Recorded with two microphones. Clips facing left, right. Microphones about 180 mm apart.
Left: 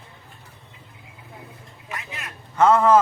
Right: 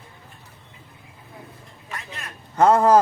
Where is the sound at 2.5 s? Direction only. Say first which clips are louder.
Right 1 dB; 35° right (ahead or behind).